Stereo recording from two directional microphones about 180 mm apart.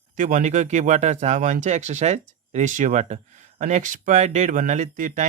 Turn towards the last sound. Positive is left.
turn(degrees=-45)  # may be behind; listen again after turning